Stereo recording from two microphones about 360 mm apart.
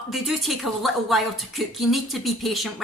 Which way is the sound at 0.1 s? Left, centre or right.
Centre.